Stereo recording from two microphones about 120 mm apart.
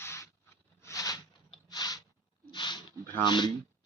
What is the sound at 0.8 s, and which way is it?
Zipper, 25° left (ahead or behind).